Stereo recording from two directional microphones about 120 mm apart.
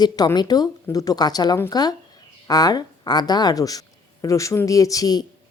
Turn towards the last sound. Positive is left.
turn(degrees=30)  # may be behind; listen again after turning